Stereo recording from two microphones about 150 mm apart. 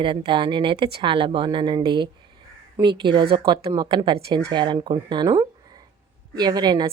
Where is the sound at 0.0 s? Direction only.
35° right (ahead or behind).